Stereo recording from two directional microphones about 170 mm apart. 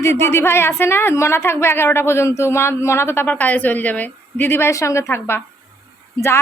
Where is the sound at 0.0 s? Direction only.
15° left (ahead or behind).